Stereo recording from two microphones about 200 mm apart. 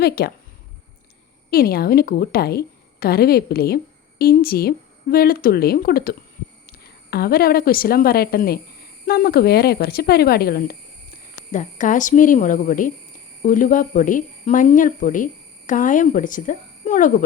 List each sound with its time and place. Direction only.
0.0 s a woman's voice: 50° left (ahead or behind)
1.5 s a woman's voice: 50° left (ahead or behind)
11.5 s speech: 40° left (ahead or behind)